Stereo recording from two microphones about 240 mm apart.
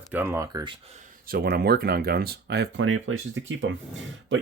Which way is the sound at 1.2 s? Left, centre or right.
Right.